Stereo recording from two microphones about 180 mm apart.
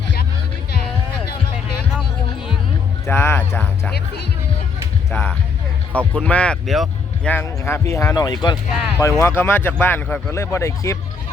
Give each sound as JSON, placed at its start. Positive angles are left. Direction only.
{"t": 3.1, "sound": "speech", "side_deg": 15}
{"t": 3.9, "sound": "speech", "side_deg": 65}
{"t": 5.9, "sound": "speech", "side_deg": -10}
{"t": 6.2, "sound": "speech", "side_deg": 5}